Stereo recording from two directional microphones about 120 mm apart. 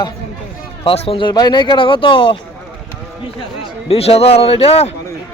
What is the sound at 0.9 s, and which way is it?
Speech, 50° left (ahead or behind).